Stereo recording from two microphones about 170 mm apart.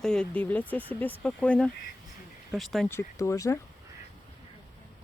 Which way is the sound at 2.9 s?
20° left (ahead or behind).